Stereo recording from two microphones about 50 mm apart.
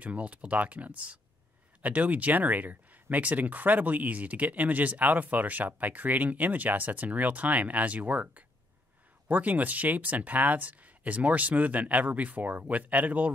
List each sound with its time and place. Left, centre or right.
0.0 s speech: right